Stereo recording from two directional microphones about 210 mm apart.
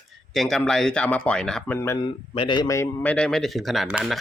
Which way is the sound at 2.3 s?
25° left (ahead or behind).